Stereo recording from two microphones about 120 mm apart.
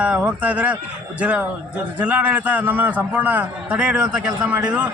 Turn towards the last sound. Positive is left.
turn(degrees=-10)  # may be behind; listen again after turning